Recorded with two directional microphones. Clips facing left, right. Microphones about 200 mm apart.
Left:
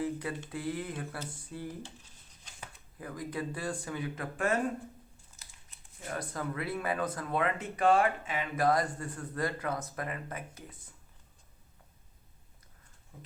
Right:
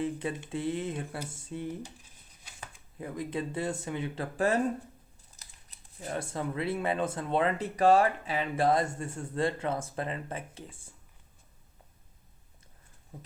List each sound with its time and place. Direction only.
0.0 s speech: 25° right (ahead or behind)
3.0 s speech: 25° right (ahead or behind)